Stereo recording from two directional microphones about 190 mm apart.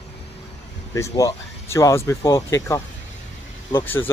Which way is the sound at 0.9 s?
15° left (ahead or behind).